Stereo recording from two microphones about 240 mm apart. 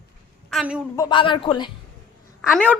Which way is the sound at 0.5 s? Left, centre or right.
Centre.